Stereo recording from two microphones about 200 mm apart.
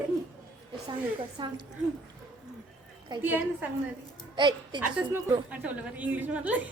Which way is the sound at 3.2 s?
10° right (ahead or behind).